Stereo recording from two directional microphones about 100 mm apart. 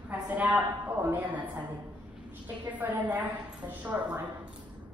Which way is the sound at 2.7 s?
15° right (ahead or behind).